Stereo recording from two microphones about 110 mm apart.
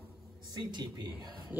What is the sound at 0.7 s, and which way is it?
Speech, 40° right (ahead or behind).